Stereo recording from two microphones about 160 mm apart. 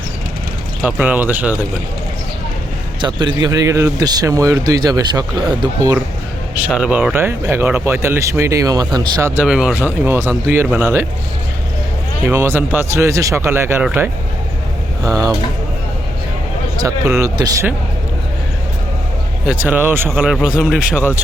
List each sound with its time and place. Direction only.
0.8 s speech: 10° right (ahead or behind)
3.0 s speech: 30° right (ahead or behind)
6.7 s speech: 5° right (ahead or behind); by 9.3 s 25° right (ahead or behind)
9.3 s speech: 5° right (ahead or behind)
12.2 s speech: 15° right (ahead or behind)
16.8 s speech: 20° right (ahead or behind)
19.5 s speech: 10° right (ahead or behind)